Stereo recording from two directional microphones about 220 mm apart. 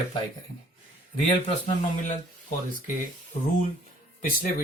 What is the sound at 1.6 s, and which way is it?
Speech, 35° left (ahead or behind).